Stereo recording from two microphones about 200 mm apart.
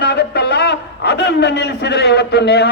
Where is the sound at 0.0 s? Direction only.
55° left (ahead or behind).